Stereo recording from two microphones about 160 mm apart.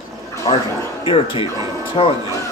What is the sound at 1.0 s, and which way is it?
Speech, 35° left (ahead or behind).